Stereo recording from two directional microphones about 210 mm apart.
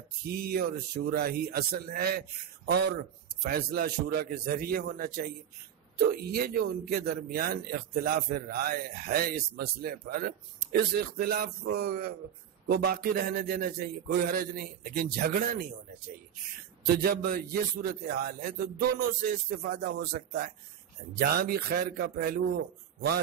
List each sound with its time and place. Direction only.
0.3 s a man's voice: 45° right (ahead or behind)
16.8 s a man's voice: 45° right (ahead or behind)